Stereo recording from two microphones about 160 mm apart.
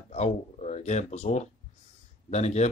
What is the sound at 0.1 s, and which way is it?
A man's voice, 45° left (ahead or behind).